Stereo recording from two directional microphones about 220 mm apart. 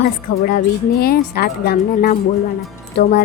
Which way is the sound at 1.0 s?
45° left (ahead or behind).